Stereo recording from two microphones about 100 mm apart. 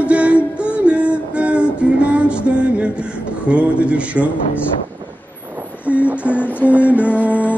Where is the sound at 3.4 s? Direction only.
10° right (ahead or behind).